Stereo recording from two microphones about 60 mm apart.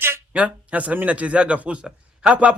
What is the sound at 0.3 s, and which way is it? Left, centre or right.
A man's voice, centre.